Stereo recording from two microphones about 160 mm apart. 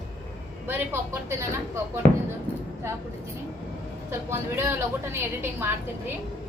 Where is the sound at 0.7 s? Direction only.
15° right (ahead or behind).